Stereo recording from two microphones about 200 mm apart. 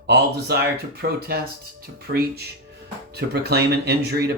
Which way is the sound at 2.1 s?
50° right (ahead or behind).